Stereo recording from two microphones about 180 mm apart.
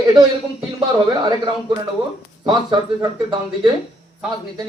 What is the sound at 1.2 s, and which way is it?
Speech, 25° right (ahead or behind).